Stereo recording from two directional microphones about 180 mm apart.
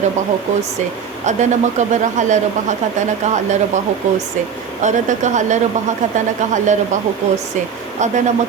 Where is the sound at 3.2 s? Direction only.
40° right (ahead or behind).